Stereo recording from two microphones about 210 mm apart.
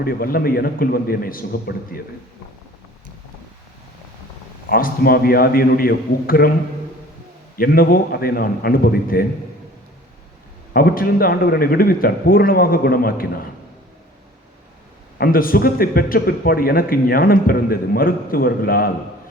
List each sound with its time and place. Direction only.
0.0 s a man's voice: 45° left (ahead or behind)
4.7 s a man's voice: 45° left (ahead or behind)
7.5 s a man's voice: 45° left (ahead or behind)
10.8 s a man's voice: 45° left (ahead or behind)
15.2 s a man's voice: 45° left (ahead or behind)